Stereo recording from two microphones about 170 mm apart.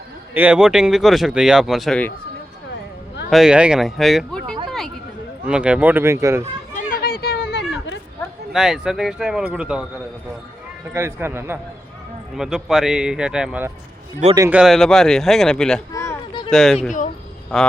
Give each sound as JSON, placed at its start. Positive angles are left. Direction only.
{"t": 0.3, "sound": "speech", "side_deg": -5}
{"t": 3.2, "sound": "speech", "side_deg": 0}
{"t": 6.7, "sound": "a sound", "side_deg": 60}
{"t": 8.5, "sound": "speech", "side_deg": 0}
{"t": 10.9, "sound": "speech", "side_deg": -15}
{"t": 12.4, "sound": "speech", "side_deg": 0}
{"t": 15.9, "sound": "a sound", "side_deg": 20}
{"t": 16.5, "sound": "speech", "side_deg": 0}